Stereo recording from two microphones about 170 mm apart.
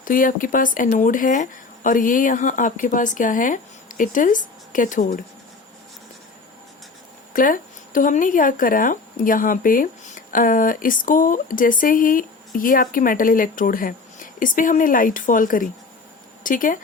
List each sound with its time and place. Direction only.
0.0 s speech: 55° left (ahead or behind)
7.3 s speech: 55° left (ahead or behind)